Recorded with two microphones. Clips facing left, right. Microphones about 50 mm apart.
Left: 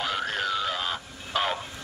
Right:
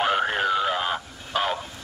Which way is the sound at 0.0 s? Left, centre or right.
Right.